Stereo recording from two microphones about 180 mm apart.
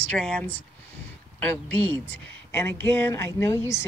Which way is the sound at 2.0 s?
10° left (ahead or behind).